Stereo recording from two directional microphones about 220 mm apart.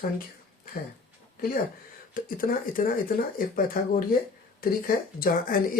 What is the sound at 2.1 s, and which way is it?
Speech, 40° left (ahead or behind).